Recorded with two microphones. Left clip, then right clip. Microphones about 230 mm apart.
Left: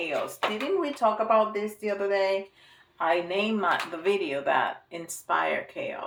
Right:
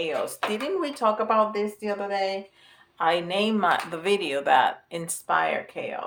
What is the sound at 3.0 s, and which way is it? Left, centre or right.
Speech, right.